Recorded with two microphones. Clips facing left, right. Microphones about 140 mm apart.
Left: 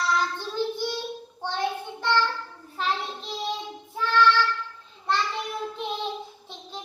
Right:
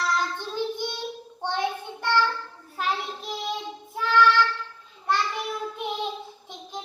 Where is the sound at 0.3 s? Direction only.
15° right (ahead or behind).